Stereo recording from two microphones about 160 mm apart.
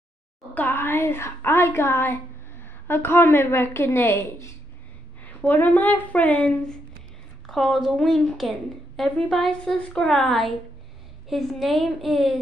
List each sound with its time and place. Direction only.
0.6 s a woman's voice: 10° left (ahead or behind)